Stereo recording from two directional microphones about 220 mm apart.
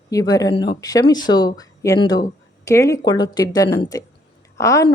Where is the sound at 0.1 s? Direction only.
15° left (ahead or behind).